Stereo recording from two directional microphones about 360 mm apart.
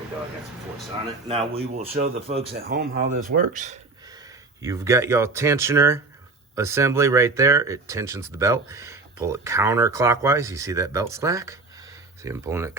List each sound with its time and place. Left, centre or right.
1.3 s speech: centre
4.6 s speech: centre